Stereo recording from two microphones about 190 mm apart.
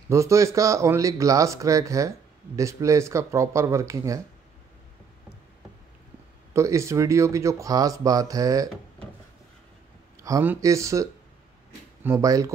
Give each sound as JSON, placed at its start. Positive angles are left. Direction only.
{"t": 0.1, "sound": "speech", "side_deg": -15}
{"t": 6.5, "sound": "speech", "side_deg": -15}
{"t": 10.2, "sound": "speech", "side_deg": -15}